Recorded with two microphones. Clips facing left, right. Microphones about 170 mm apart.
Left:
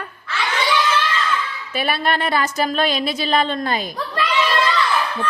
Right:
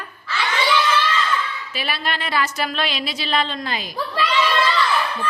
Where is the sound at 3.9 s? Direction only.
Centre (ahead or behind).